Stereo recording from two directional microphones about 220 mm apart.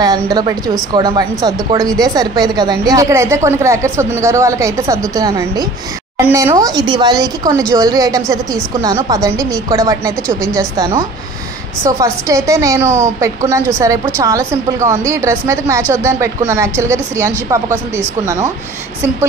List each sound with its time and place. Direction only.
0.0 s a woman's voice: 20° right (ahead or behind)